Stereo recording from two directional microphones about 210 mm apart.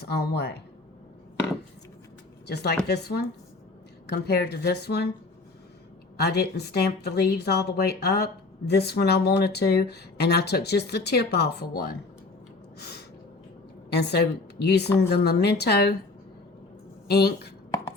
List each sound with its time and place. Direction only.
0.0 s speech: 50° left (ahead or behind)
2.5 s speech: 50° left (ahead or behind)
6.2 s speech: 50° left (ahead or behind)
12.8 s gasp: 50° left (ahead or behind)
13.9 s speech: 50° left (ahead or behind)
17.1 s speech: 50° left (ahead or behind)